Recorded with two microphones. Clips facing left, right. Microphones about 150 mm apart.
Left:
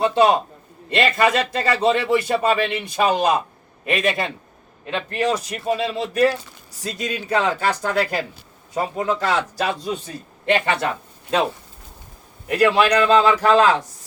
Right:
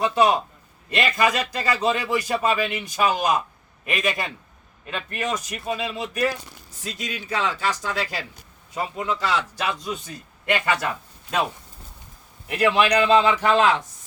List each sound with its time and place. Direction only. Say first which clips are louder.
0.0 s a man's voice: left 3 dB; 25° left (ahead or behind)
6.8 s speech: left 6 dB; 50° left (ahead or behind)
8.7 s a man's voice: left 5 dB; 45° left (ahead or behind)
12.5 s speech: left 3 dB; 35° left (ahead or behind)